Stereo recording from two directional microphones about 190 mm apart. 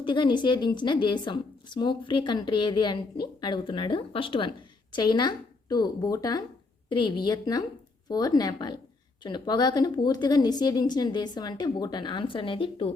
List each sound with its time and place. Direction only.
0.0 s a woman's voice: 25° left (ahead or behind)